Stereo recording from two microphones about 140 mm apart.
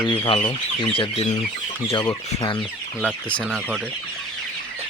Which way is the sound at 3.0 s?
10° left (ahead or behind).